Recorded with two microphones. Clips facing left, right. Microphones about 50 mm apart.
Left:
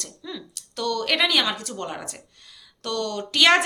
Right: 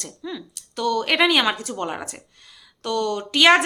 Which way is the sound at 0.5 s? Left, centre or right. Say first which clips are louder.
Right 4 dB; centre.